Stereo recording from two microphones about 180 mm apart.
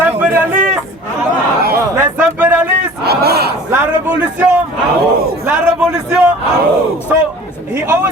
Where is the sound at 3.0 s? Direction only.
60° right (ahead or behind).